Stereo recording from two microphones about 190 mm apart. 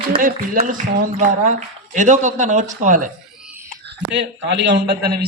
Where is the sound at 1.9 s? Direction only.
40° right (ahead or behind).